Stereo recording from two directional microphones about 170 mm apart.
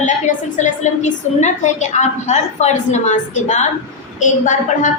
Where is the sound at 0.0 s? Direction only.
45° left (ahead or behind).